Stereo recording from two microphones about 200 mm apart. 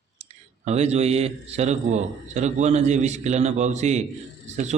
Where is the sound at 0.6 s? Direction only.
30° right (ahead or behind).